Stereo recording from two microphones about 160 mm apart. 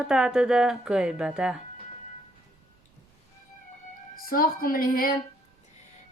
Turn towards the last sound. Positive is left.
turn(degrees=65)  # may be behind; listen again after turning